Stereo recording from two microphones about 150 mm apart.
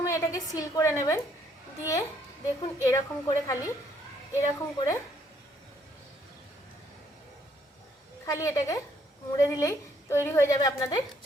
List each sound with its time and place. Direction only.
0.0 s a woman's voice: 20° left (ahead or behind)
8.2 s a woman's voice: 20° left (ahead or behind)